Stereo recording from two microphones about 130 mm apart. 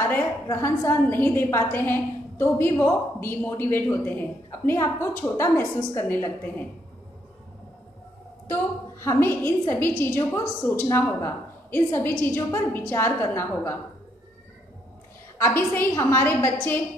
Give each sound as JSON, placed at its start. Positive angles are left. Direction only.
{"t": 0.0, "sound": "a woman's voice", "side_deg": 20}
{"t": 8.5, "sound": "a woman's voice", "side_deg": 20}
{"t": 15.3, "sound": "a woman's voice", "side_deg": 20}